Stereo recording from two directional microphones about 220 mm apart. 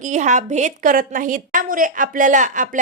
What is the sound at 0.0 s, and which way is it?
A woman's voice, 35° right (ahead or behind).